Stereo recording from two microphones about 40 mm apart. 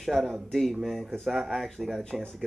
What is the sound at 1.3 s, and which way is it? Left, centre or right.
Speech, centre.